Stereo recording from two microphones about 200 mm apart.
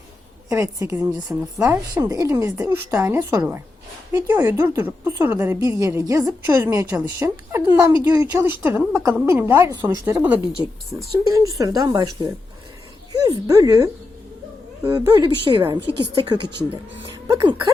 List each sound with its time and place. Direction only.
0.4 s a woman's voice: 15° right (ahead or behind)